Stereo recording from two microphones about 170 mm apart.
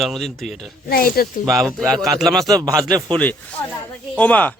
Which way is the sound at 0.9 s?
60° left (ahead or behind).